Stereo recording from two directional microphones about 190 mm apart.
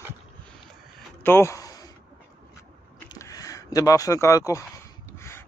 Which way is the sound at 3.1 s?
20° left (ahead or behind).